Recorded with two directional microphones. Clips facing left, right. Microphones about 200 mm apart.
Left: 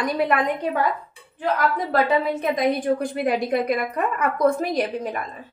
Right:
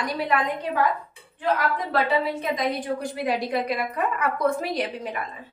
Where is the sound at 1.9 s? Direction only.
50° left (ahead or behind).